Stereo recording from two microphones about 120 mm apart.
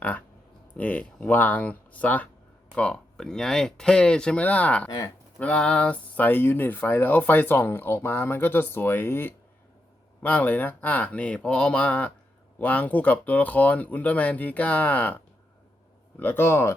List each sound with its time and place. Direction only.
0.7 s speech: 10° left (ahead or behind)
16.2 s speech: 20° left (ahead or behind)